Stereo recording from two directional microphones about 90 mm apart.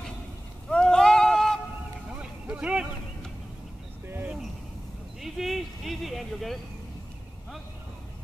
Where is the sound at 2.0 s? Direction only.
10° right (ahead or behind).